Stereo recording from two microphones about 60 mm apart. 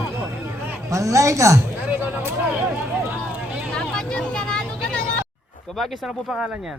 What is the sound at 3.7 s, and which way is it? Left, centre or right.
Vehicle, centre.